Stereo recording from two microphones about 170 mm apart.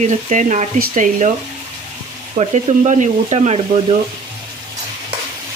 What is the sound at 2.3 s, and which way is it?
Speech, 40° right (ahead or behind).